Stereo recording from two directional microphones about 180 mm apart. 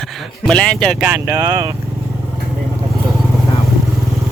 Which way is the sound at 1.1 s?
15° right (ahead or behind).